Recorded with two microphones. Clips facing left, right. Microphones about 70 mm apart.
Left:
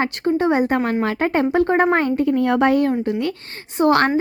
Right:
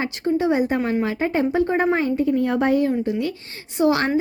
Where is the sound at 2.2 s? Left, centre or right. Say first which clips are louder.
Left 3 dB; left.